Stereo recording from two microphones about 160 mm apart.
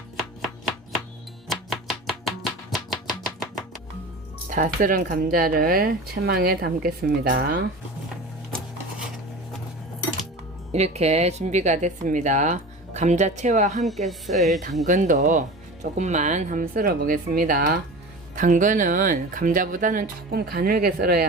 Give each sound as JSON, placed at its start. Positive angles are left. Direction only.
{"t": 1.5, "sound": "chopping", "side_deg": 0}
{"t": 4.4, "sound": "speech", "side_deg": -55}
{"t": 8.5, "sound": "dishes", "side_deg": 0}
{"t": 10.7, "sound": "speech", "side_deg": -45}
{"t": 13.8, "sound": "speech", "side_deg": 0}
{"t": 14.8, "sound": "speech", "side_deg": -50}
{"t": 18.3, "sound": "speech", "side_deg": -55}